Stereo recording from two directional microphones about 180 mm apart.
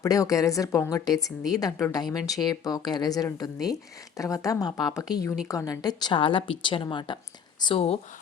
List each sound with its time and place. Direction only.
0.0 s speech: 20° left (ahead or behind)